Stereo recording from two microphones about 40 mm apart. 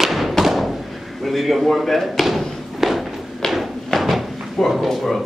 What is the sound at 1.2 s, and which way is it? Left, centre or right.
A man's voice, centre.